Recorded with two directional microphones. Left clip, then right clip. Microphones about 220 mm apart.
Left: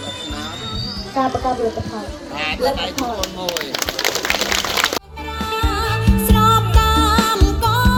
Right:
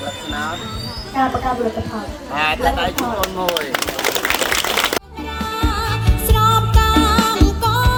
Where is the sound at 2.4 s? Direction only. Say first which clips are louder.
Right 3 dB; 40° right (ahead or behind).